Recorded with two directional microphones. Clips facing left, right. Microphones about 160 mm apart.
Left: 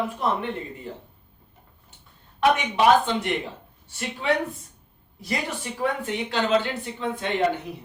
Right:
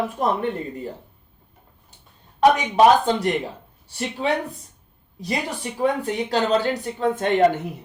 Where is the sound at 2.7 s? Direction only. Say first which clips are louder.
Right 3 dB; 40° right (ahead or behind).